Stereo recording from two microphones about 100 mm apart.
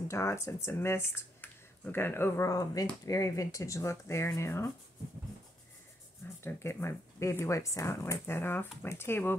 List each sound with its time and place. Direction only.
0.1 s speech: 30° left (ahead or behind)
6.4 s speech: 25° left (ahead or behind)